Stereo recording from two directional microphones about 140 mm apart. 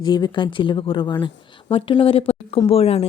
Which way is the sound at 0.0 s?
35° left (ahead or behind).